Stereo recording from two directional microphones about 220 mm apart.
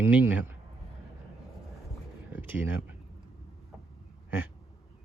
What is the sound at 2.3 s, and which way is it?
Speech, 10° right (ahead or behind).